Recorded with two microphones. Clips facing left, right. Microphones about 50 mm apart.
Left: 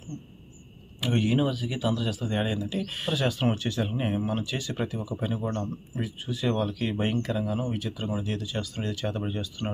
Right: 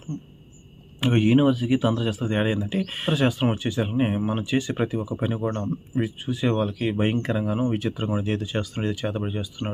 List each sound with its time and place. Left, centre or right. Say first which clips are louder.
1.0 s speech: right 7 dB; right
3.2 s speech: right 3 dB; centre